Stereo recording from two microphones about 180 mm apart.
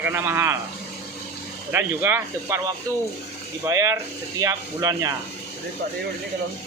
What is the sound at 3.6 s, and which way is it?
Speech, 15° right (ahead or behind).